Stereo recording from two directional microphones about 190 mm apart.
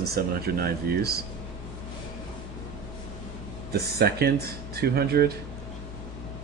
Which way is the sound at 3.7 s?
55° right (ahead or behind).